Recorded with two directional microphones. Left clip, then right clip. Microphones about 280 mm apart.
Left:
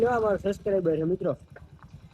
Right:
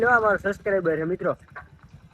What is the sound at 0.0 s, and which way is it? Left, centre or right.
Speech, centre.